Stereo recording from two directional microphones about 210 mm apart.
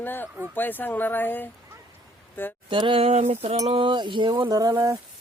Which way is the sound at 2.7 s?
25° right (ahead or behind).